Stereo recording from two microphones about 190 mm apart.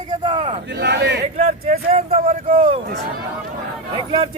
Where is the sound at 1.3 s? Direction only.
35° right (ahead or behind).